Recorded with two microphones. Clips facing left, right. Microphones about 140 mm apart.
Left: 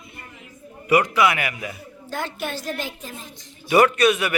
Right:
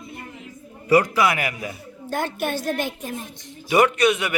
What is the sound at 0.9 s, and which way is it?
Speech, 35° right (ahead or behind).